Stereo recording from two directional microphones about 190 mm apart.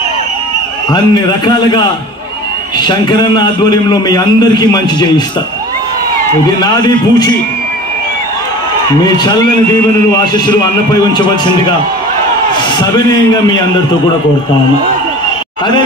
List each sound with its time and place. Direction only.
0.9 s a man's voice: 20° left (ahead or behind)
2.9 s a man's voice: 20° left (ahead or behind)
6.4 s a man's voice: 20° left (ahead or behind)
10.3 s a man's voice: 25° left (ahead or behind)